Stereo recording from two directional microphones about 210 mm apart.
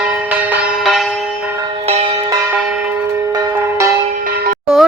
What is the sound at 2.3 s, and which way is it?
Church bell, 10° right (ahead or behind).